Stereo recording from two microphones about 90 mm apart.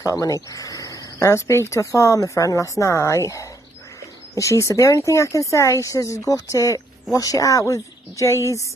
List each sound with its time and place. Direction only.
0.0 s speech: 40° left (ahead or behind)